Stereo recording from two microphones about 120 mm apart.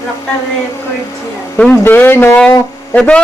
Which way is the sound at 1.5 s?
15° left (ahead or behind).